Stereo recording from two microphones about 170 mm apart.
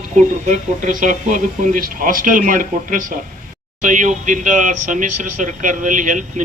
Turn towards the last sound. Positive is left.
turn(degrees=-50)  # may be behind; listen again after turning